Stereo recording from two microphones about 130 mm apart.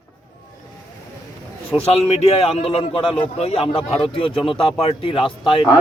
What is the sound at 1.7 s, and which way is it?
A man's voice, 50° left (ahead or behind).